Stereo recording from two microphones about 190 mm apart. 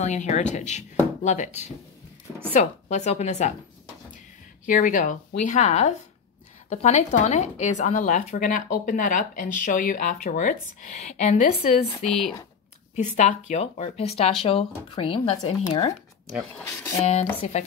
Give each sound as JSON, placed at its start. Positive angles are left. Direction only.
{"t": 0.0, "sound": "speech", "side_deg": 40}
{"t": 2.6, "sound": "speech", "side_deg": 40}
{"t": 4.6, "sound": "speech", "side_deg": 45}
{"t": 12.0, "sound": "speech", "side_deg": 0}
{"t": 12.9, "sound": "speech", "side_deg": 40}
{"t": 16.5, "sound": "speech", "side_deg": 10}
{"t": 17.0, "sound": "speech", "side_deg": 35}